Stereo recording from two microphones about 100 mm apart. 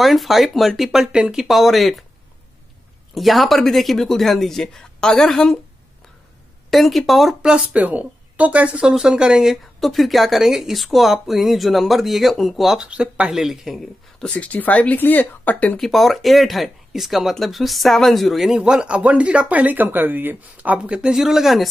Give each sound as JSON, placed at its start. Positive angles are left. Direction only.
{"t": 0.0, "sound": "speech", "side_deg": 0}
{"t": 3.2, "sound": "speech", "side_deg": 0}
{"t": 6.7, "sound": "speech", "side_deg": 0}
{"t": 14.2, "sound": "speech", "side_deg": 15}
{"t": 15.8, "sound": "speech", "side_deg": 0}